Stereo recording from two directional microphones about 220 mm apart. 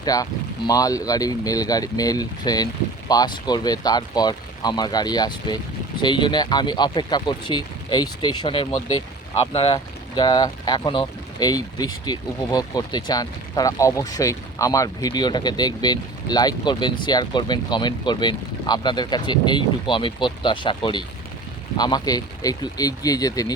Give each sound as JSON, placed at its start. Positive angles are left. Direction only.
{"t": 0.0, "sound": "speech", "side_deg": 15}